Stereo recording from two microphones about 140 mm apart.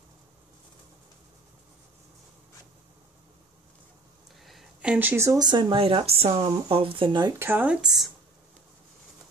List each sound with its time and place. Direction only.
4.5 s a sound: centre (ahead or behind)
4.9 s speech: 15° right (ahead or behind); by 7.3 s 30° right (ahead or behind)
7.3 s speech: 15° right (ahead or behind)